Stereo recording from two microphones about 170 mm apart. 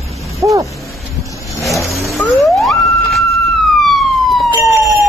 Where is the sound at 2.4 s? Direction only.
Centre (ahead or behind).